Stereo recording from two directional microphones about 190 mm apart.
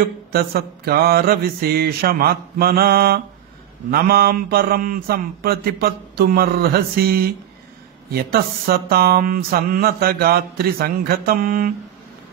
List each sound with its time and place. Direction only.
0.3 s mantra: 55° right (ahead or behind)